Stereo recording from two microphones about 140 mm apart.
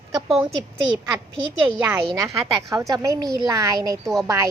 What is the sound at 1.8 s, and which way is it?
Speech, 20° right (ahead or behind).